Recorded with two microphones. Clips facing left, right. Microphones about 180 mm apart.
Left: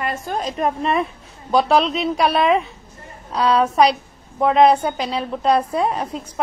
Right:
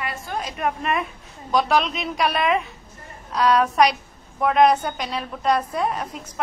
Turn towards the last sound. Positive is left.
turn(degrees=30)  # may be behind; listen again after turning